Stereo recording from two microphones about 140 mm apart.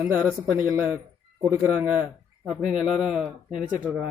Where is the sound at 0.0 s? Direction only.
15° right (ahead or behind).